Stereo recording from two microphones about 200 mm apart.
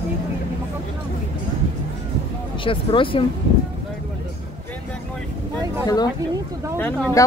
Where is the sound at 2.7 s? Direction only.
25° left (ahead or behind).